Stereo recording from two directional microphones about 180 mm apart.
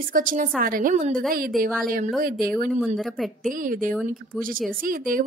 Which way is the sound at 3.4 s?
50° right (ahead or behind).